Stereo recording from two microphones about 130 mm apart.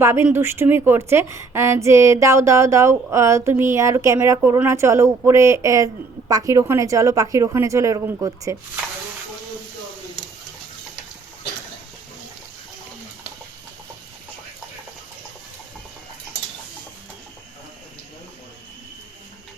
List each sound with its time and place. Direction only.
0.0 s a woman's voice: 20° right (ahead or behind)